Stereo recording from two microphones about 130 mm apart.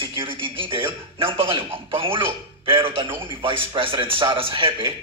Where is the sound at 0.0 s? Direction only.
45° right (ahead or behind).